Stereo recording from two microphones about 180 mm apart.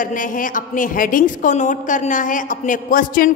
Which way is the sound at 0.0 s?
50° left (ahead or behind).